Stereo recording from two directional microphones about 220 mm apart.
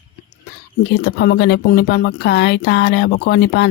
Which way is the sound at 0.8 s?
50° left (ahead or behind).